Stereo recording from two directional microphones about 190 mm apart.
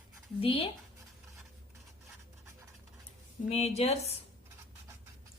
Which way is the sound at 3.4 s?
35° left (ahead or behind).